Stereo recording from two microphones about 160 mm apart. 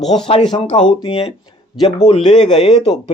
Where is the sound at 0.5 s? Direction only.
40° left (ahead or behind).